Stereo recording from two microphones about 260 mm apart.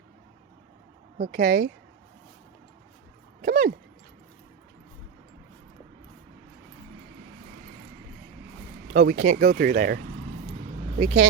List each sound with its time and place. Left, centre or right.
1.2 s speech: right
3.4 s dog: right
8.9 s speech: right
10.8 s keys jangling: right